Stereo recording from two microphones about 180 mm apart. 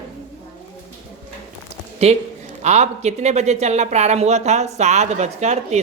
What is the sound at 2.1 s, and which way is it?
Speech, 35° right (ahead or behind).